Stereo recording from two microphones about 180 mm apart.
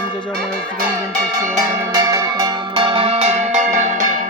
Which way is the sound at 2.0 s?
20° right (ahead or behind).